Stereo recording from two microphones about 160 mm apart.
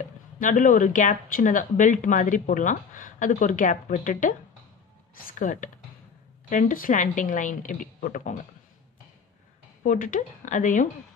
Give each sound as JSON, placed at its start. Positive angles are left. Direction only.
{"t": 0.0, "sound": "a woman's voice", "side_deg": 55}
{"t": 9.8, "sound": "a woman's voice", "side_deg": 55}